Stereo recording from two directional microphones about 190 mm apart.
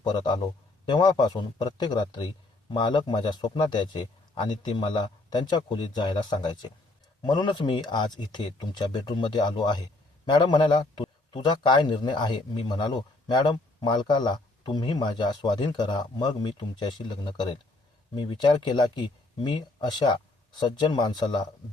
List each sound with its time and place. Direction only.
0.0 s a man's voice: 25° left (ahead or behind)